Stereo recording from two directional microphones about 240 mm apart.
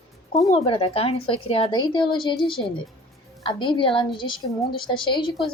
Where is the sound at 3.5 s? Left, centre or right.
Centre.